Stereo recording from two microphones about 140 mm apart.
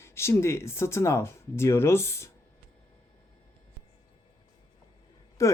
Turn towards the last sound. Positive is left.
turn(degrees=20)  # may be behind; listen again after turning